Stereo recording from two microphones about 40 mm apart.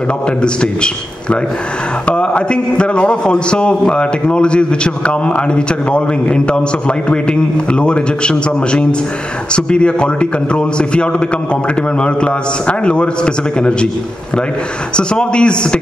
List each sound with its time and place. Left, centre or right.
2.0 s a man's voice: left
15.0 s a man's voice: left